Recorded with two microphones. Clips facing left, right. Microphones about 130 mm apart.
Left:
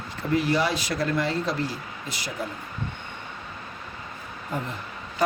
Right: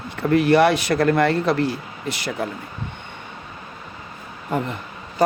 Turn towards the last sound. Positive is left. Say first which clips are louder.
# right 7 dB
turn(degrees=-75)  # may be behind; listen again after turning